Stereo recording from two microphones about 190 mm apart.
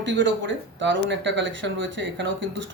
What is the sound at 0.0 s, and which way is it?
A woman's voice, 65° right (ahead or behind).